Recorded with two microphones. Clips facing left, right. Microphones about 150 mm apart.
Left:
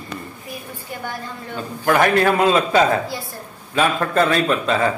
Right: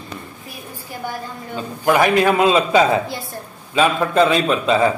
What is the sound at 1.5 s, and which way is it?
A man's voice, 15° right (ahead or behind).